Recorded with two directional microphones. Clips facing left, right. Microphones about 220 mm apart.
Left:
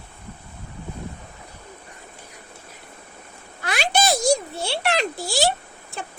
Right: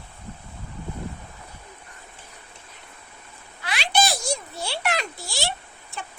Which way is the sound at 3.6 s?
45° left (ahead or behind).